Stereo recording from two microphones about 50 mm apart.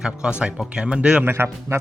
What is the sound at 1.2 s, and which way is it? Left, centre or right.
Speech, right.